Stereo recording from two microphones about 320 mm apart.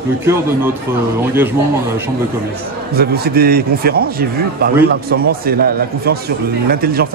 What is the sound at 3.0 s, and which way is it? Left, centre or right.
A man's voice, right.